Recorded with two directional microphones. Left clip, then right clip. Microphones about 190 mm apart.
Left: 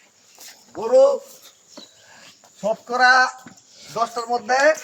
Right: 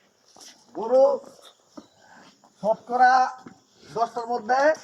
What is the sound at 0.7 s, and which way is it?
Speech, 10° left (ahead or behind).